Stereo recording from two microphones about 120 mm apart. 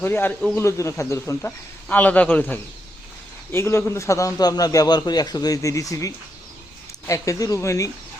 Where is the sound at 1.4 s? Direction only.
15° left (ahead or behind).